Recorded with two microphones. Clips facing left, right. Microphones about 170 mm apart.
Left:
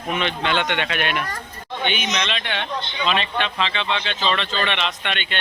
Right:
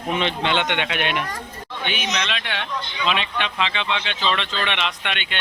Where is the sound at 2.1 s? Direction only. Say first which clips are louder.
Left 1 dB; centre (ahead or behind).